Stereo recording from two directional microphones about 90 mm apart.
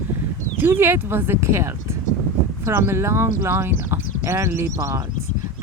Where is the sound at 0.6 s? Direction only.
25° right (ahead or behind).